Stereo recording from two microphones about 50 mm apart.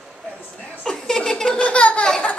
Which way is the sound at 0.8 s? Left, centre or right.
Centre.